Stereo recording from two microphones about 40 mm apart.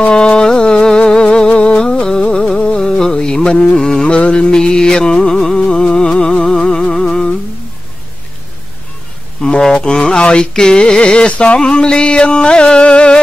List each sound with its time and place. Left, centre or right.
0.0 s music: left
2.4 s a sound: left
3.0 s music: centre
4.1 s music: left
4.5 s music: centre
9.6 s music: left